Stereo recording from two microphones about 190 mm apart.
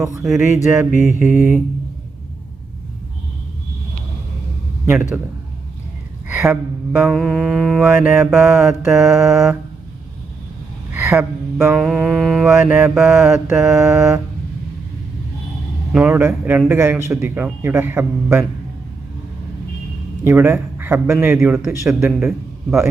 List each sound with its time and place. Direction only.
0.0 s a man's voice: 15° right (ahead or behind)
0.3 s mantra: centre (ahead or behind)
0.5 s a man's voice: 15° right (ahead or behind)
6.3 s speech: 10° right (ahead or behind)
7.1 s mantra: 5° left (ahead or behind)
10.9 s music: 10° right (ahead or behind)
11.9 s mantra: centre (ahead or behind)
15.9 s a man's voice: 5° right (ahead or behind)
20.2 s a man's voice: 10° right (ahead or behind)